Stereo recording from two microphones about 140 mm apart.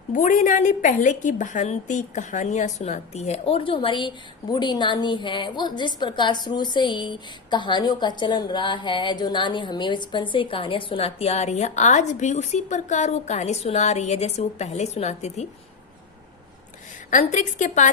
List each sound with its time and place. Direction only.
0.1 s a woman's voice: 70° left (ahead or behind); by 15.4 s 55° left (ahead or behind)
17.1 s a woman's voice: 65° left (ahead or behind)